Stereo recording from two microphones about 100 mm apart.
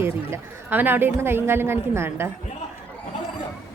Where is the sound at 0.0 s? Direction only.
20° right (ahead or behind).